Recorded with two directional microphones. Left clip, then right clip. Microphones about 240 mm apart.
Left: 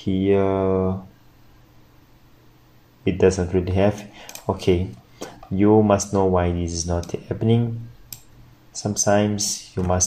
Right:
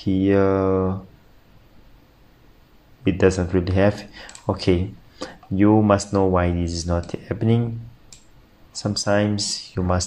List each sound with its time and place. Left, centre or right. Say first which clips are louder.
0.0 s speech: right 1 dB; right
3.0 s speech: even; right
8.7 s speech: left 1 dB; right